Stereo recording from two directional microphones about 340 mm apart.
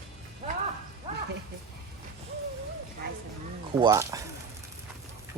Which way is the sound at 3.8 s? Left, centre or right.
Centre.